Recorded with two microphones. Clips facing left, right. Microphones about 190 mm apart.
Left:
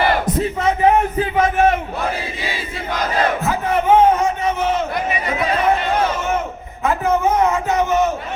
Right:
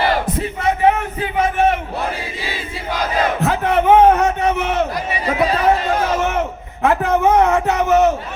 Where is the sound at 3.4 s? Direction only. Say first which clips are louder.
Right 3 dB; 65° right (ahead or behind).